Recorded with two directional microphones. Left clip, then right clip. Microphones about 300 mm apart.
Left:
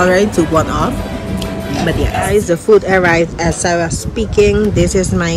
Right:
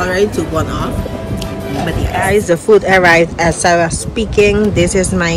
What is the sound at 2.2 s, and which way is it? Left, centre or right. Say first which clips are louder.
Speech: right 2 dB; centre.